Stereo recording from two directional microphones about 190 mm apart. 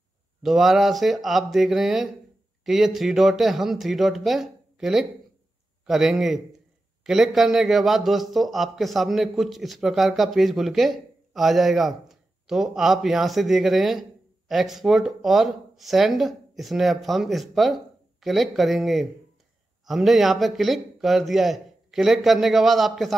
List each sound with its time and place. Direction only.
0.4 s a man's voice: centre (ahead or behind)